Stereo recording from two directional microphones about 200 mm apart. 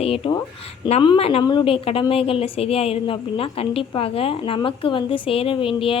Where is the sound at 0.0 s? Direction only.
30° left (ahead or behind).